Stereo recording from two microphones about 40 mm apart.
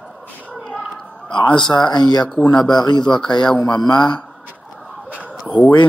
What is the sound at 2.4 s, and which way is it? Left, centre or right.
Speech, left.